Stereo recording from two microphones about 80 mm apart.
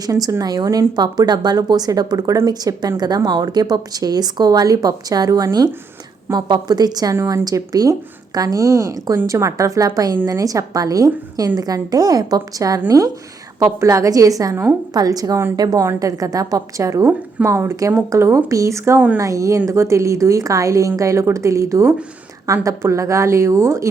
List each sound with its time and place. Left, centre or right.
0.0 s a woman's voice: right
18.9 s speech: centre
19.2 s a woman's voice: right